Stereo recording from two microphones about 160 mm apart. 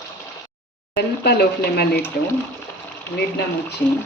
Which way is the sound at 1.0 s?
90° left.